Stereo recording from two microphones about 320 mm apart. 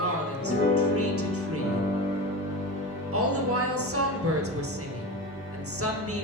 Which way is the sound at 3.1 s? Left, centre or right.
Right.